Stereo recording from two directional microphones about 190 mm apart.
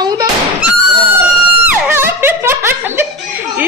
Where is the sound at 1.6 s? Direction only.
10° right (ahead or behind).